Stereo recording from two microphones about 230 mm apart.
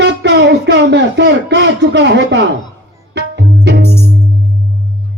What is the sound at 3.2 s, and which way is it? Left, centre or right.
Music, right.